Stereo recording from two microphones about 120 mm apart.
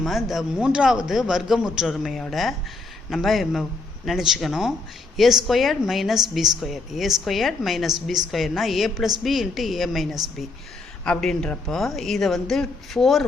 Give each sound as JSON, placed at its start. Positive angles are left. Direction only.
{"t": 0.0, "sound": "a man's voice", "side_deg": 0}